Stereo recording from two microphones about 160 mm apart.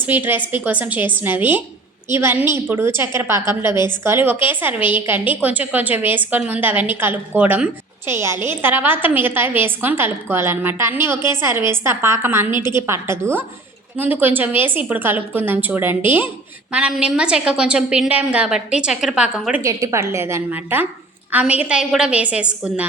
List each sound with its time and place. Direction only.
0.0 s a woman's voice: 10° right (ahead or behind)
19.6 s a woman's voice: 20° right (ahead or behind)